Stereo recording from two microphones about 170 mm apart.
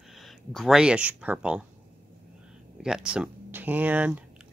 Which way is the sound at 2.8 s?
5° right (ahead or behind).